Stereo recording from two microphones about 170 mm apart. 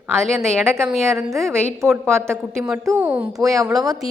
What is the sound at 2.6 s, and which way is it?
Speech, 5° right (ahead or behind).